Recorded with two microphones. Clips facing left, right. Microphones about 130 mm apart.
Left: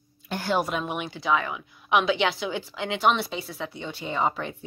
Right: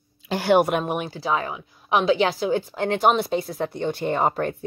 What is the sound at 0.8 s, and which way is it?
A woman's voice, 40° right (ahead or behind).